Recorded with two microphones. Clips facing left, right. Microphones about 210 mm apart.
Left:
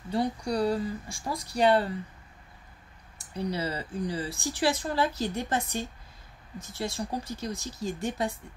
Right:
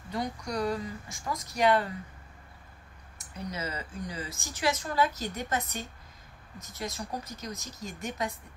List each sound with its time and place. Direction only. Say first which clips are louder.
0.1 s speech: left 5 dB; 30° left (ahead or behind)
3.2 s speech: left 6 dB; 30° left (ahead or behind)